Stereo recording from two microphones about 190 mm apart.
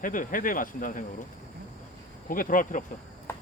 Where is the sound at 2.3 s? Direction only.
45° left (ahead or behind).